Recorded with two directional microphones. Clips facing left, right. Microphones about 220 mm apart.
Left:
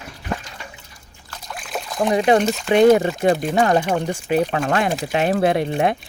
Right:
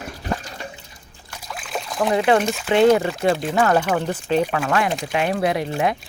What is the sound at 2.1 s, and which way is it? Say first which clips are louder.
Speech: left 2 dB; 20° left (ahead or behind).